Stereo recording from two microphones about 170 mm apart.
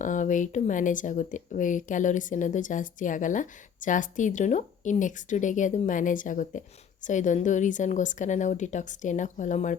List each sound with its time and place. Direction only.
0.0 s speech: 50° left (ahead or behind)